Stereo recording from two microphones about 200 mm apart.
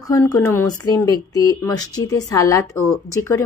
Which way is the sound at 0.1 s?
15° left (ahead or behind).